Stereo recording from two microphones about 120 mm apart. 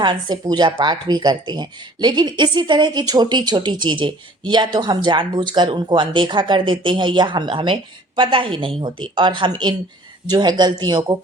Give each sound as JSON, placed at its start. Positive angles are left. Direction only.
{"t": 0.0, "sound": "a woman's voice", "side_deg": -40}